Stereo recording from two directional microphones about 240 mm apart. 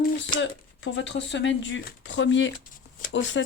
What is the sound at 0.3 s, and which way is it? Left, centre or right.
Speech, left.